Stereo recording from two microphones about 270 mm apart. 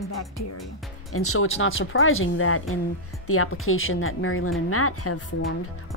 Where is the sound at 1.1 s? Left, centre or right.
Left.